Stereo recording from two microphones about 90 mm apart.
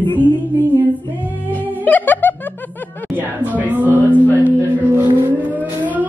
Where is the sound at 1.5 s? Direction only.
20° left (ahead or behind).